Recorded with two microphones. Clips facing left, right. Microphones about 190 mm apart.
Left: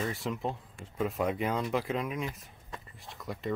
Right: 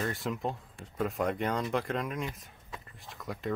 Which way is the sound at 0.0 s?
Centre (ahead or behind).